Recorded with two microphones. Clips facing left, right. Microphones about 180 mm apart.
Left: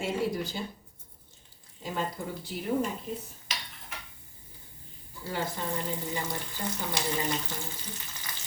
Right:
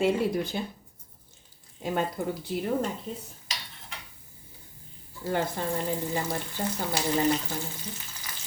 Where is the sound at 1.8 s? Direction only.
60° right (ahead or behind).